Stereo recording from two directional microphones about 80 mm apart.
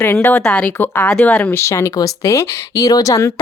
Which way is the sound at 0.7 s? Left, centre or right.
Left.